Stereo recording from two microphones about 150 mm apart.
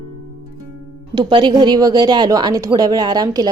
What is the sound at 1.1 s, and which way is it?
A woman's voice, 30° right (ahead or behind).